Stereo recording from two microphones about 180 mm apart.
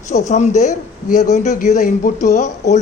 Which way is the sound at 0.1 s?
40° left (ahead or behind).